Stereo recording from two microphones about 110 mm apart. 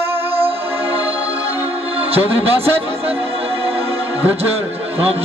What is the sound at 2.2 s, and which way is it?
Speech, 20° right (ahead or behind).